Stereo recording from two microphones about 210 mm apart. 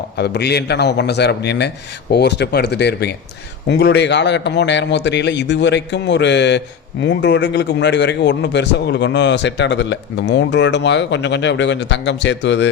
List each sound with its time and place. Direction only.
0.2 s a man's voice: 50° left (ahead or behind)